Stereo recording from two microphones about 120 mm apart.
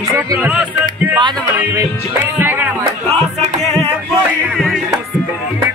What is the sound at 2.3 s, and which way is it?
Music, 15° right (ahead or behind).